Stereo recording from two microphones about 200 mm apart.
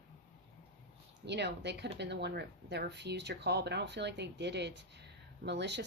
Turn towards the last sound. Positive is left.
turn(degrees=-60)  # may be behind; listen again after turning